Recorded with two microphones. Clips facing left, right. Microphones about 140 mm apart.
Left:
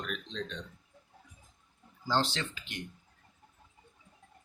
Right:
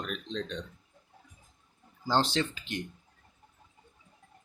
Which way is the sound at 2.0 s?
20° right (ahead or behind).